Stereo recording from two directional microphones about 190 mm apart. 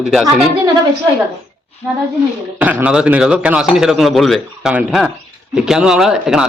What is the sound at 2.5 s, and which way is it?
A man's voice, 10° right (ahead or behind).